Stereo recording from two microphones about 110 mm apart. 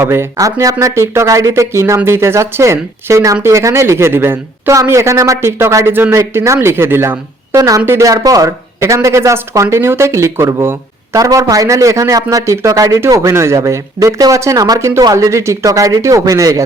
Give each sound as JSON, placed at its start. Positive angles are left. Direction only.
{"t": 0.0, "sound": "speech", "side_deg": -20}